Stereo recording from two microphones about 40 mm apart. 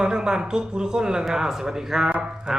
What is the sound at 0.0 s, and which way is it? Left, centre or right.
Speech, centre.